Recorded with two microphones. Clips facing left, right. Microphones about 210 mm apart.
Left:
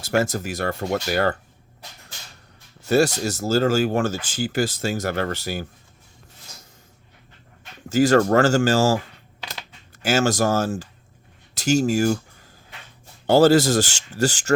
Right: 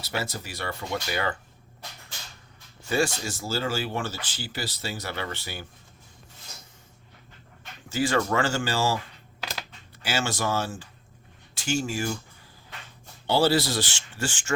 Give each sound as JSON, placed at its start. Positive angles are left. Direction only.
{"t": 0.0, "sound": "speech", "side_deg": 45}
{"t": 2.8, "sound": "speech", "side_deg": 40}
{"t": 7.9, "sound": "speech", "side_deg": 40}
{"t": 10.0, "sound": "speech", "side_deg": 45}
{"t": 13.2, "sound": "speech", "side_deg": 45}